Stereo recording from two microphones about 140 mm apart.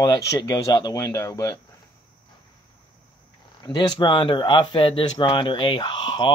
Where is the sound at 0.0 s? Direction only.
25° left (ahead or behind).